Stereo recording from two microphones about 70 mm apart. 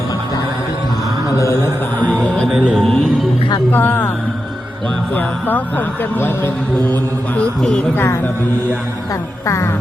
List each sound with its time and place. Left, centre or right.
2.2 s music: centre
3.7 s speech: left
5.1 s speech: left
7.6 s speech: centre
7.9 s speech: left